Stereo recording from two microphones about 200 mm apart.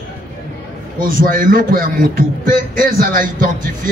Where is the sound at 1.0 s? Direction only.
45° right (ahead or behind).